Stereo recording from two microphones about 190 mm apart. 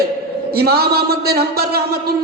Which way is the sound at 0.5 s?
55° right (ahead or behind).